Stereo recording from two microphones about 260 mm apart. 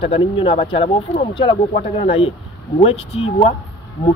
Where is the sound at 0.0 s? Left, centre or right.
Centre.